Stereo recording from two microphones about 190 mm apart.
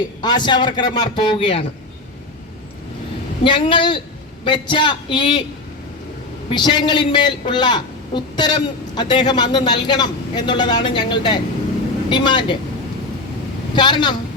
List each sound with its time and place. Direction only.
0.2 s a man's voice: 25° left (ahead or behind)
3.4 s a man's voice: 25° left (ahead or behind)
6.5 s a man's voice: 25° left (ahead or behind)
13.7 s a man's voice: 25° left (ahead or behind)